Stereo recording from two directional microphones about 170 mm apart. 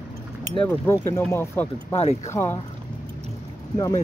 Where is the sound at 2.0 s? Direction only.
40° left (ahead or behind).